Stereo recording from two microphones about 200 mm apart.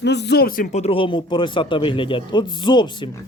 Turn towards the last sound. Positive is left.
turn(degrees=25)  # may be behind; listen again after turning